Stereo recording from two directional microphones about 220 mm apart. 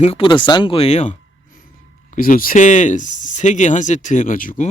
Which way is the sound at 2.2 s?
40° left (ahead or behind).